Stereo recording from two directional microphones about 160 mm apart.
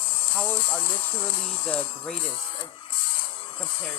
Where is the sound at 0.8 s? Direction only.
30° left (ahead or behind).